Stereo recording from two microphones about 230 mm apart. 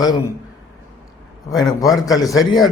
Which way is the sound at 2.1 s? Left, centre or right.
Centre.